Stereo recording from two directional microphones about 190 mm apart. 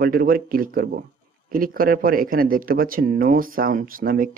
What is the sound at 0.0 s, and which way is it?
Speech, 50° right (ahead or behind).